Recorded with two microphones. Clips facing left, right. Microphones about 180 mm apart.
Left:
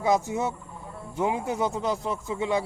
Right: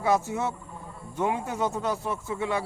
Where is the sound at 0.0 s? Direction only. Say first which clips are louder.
Left 1 dB; 15° left (ahead or behind).